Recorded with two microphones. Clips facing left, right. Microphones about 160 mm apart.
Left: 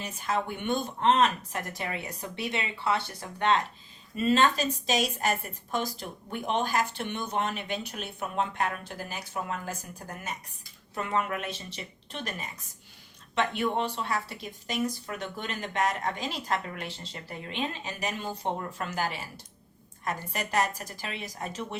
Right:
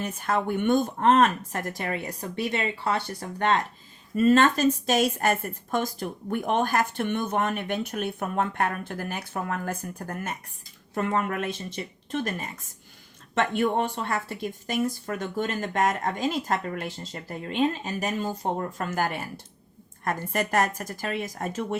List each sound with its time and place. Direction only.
0.0 s a woman's voice: 55° right (ahead or behind)